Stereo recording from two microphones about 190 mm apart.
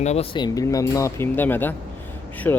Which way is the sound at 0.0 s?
35° left (ahead or behind).